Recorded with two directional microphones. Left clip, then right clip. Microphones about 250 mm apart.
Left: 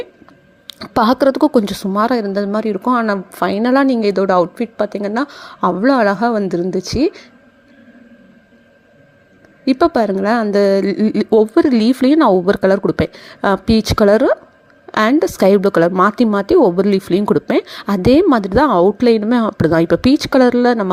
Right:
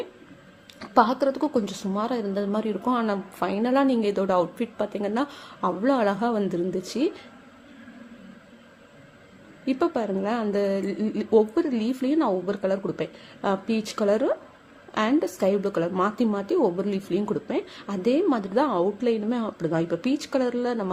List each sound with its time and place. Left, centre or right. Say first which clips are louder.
0.7 s speech: left 6 dB; left
9.6 s a woman's voice: left 12 dB; left